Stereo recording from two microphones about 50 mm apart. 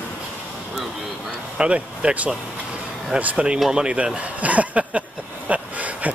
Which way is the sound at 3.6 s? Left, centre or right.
Centre.